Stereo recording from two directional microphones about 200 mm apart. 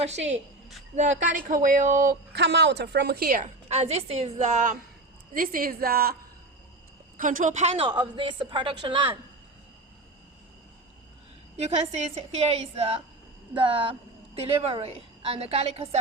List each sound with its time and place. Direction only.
0.9 s a woman's voice: 40° right (ahead or behind)
7.2 s a woman's voice: 40° right (ahead or behind); by 9.1 s 25° right (ahead or behind)
11.5 s a woman's voice: 30° right (ahead or behind)